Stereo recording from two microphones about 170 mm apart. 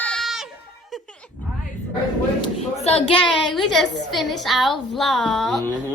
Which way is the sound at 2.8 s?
40° left (ahead or behind).